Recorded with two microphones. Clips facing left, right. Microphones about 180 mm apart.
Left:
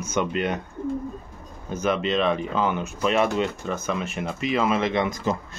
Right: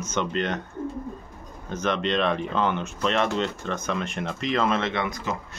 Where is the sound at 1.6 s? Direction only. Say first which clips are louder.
Left 2 dB; 10° left (ahead or behind).